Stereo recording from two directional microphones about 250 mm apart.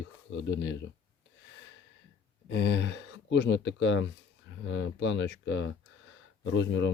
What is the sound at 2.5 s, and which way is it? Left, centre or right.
Speech, left.